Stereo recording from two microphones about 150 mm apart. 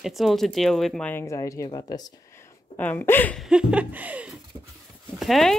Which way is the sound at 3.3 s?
5° right (ahead or behind).